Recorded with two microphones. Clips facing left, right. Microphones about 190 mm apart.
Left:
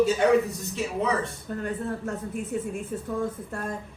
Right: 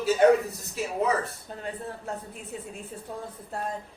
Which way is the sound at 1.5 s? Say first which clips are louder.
Left 6 dB; 60° left (ahead or behind).